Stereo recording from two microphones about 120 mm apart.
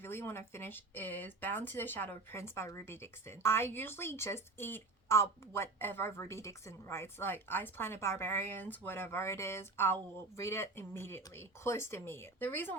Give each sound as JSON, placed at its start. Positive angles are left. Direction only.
{"t": 0.0, "sound": "speech", "side_deg": 20}